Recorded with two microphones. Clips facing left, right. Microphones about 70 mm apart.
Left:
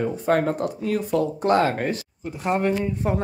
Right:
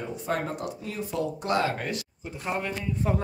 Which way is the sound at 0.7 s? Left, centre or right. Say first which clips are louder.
Left 10 dB; left.